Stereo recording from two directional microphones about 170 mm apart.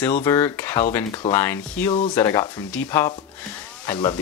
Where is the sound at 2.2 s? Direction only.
20° left (ahead or behind).